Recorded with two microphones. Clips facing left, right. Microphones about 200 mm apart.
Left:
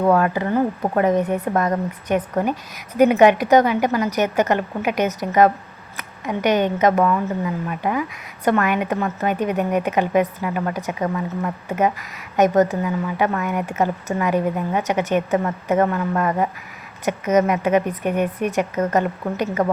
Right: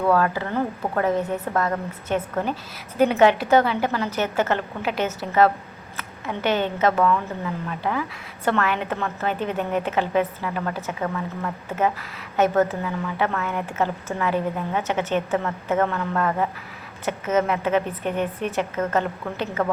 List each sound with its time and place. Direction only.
0.0 s a woman's voice: 20° left (ahead or behind)